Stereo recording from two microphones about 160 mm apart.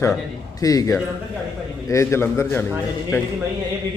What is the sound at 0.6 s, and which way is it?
A man's voice, 20° left (ahead or behind).